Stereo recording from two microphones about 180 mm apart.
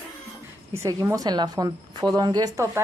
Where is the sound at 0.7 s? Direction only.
15° right (ahead or behind).